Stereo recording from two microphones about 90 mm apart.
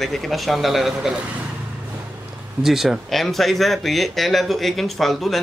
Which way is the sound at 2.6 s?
5° right (ahead or behind).